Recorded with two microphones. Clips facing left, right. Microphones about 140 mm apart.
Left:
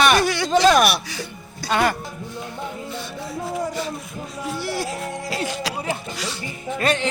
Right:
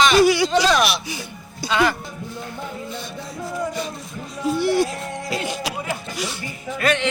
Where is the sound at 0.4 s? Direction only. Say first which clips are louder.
Left 2 dB; 45° left (ahead or behind).